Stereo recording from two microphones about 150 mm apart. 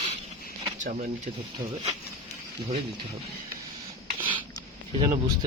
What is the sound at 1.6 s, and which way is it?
Speech, 30° right (ahead or behind).